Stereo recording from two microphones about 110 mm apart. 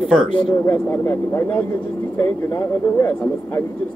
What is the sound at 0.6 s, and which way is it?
Speech, 20° left (ahead or behind).